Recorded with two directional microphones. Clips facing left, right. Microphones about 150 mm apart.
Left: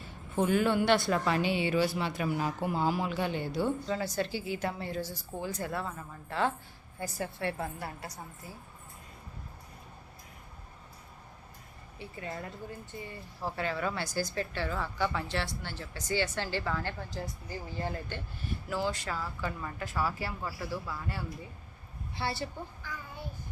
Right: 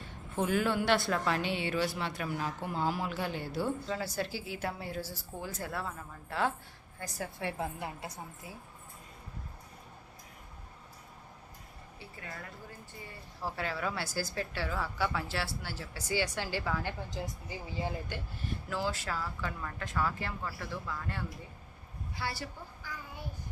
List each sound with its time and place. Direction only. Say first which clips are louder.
0.0 s a woman's voice: left 3 dB; centre (ahead or behind); by 8.2 s 20° right (ahead or behind)
11.9 s a woman's voice: left 7 dB; 25° left (ahead or behind)
13.4 s a woman's voice: left 2 dB; centre (ahead or behind)
18.3 s a woman's voice: left 3 dB; centre (ahead or behind)
22.1 s a woman's voice: left 4 dB; 25° left (ahead or behind)
22.8 s child singing: left 1 dB; 10° right (ahead or behind)